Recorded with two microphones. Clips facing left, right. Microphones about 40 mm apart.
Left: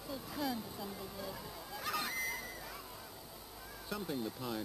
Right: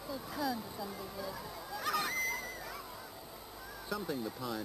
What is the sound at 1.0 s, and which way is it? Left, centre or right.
Speech, centre.